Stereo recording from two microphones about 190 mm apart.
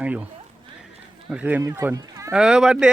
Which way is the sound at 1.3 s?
10° right (ahead or behind).